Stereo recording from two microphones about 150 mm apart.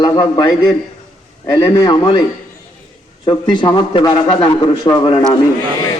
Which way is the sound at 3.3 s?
30° left (ahead or behind).